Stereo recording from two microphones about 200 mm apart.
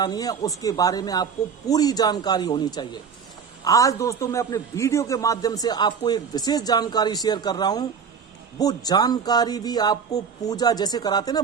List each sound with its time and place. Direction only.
0.0 s a man's voice: 20° left (ahead or behind)